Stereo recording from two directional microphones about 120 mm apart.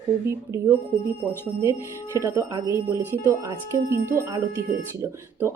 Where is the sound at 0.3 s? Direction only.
25° right (ahead or behind).